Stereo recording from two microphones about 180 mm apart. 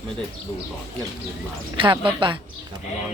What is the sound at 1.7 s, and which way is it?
Speech, 30° right (ahead or behind).